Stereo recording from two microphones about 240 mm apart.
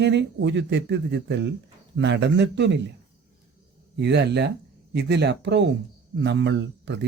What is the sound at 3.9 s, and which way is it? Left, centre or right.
A man's voice, right.